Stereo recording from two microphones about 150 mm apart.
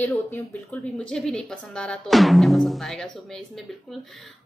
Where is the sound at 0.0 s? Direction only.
10° left (ahead or behind).